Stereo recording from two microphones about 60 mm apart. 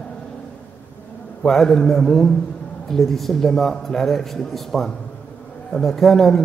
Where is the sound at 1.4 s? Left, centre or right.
Centre.